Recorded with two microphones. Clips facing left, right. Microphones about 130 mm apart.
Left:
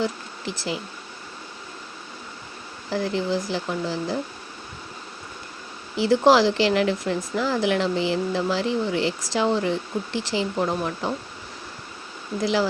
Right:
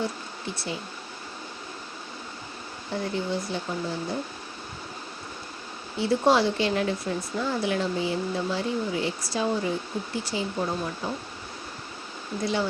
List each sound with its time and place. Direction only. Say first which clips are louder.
0.0 s speech: left 4 dB; 90° left
2.9 s speech: left 4 dB; 90° left
6.0 s speech: left 5 dB; 90° left